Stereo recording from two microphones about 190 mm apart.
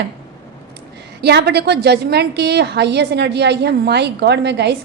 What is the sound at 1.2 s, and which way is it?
A woman's voice, 60° right (ahead or behind).